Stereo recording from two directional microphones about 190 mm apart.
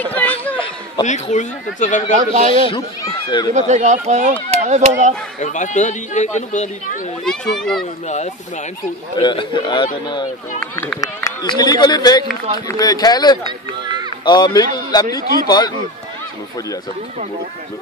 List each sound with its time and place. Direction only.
0.0 s chatter: 10° left (ahead or behind)
1.0 s a man's voice: 25° left (ahead or behind)
1.3 s speech: 40° left (ahead or behind)
2.1 s speech: 40° right (ahead or behind)
2.5 s a man's voice: 30° left (ahead or behind)
3.5 s speech: 40° right (ahead or behind)
5.4 s speech: 40° left (ahead or behind)
7.2 s speech: 5° left (ahead or behind)
9.1 s a man's voice: 25° left (ahead or behind)
10.6 s speech: 5° left (ahead or behind)
11.2 s a man's voice: 20° left (ahead or behind)